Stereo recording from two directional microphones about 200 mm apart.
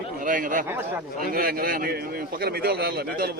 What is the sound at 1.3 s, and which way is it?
A man's voice, 45° right (ahead or behind).